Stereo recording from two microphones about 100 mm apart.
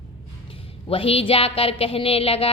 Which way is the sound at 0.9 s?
70° left (ahead or behind).